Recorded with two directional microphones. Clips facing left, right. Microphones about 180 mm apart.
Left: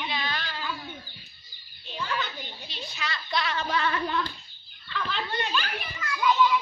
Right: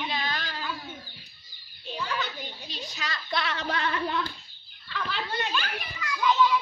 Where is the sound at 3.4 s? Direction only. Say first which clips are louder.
Left 4 dB; 65° right (ahead or behind).